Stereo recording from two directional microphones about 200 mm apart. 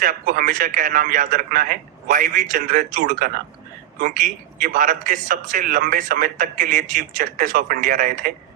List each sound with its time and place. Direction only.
0.0 s a man's voice: 45° right (ahead or behind)